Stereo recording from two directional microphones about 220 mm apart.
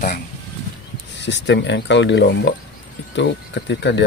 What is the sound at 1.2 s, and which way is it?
Speech, 55° left (ahead or behind).